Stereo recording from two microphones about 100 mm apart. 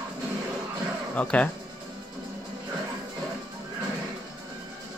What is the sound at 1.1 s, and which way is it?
Speech, 15° left (ahead or behind).